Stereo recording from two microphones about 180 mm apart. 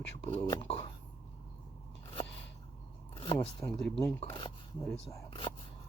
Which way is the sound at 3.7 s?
5° left (ahead or behind).